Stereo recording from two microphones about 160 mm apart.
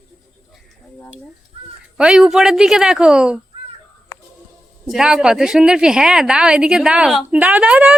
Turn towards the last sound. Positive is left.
turn(degrees=-5)  # may be behind; listen again after turning